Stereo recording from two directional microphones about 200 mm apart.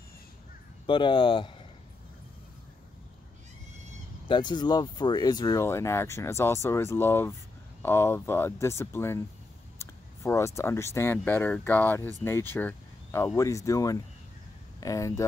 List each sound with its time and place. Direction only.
0.8 s speech: 25° left (ahead or behind)
4.3 s speech: 20° left (ahead or behind)